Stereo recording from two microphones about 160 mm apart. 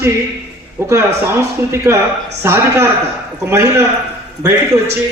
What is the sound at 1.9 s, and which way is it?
A man's voice, 15° right (ahead or behind).